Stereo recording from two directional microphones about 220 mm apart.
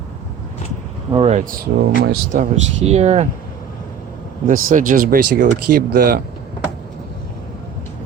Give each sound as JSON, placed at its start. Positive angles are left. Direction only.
{"t": 1.1, "sound": "speech", "side_deg": -30}
{"t": 4.4, "sound": "speech", "side_deg": -35}